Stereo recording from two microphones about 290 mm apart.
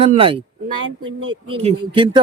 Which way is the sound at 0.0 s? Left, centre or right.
Centre.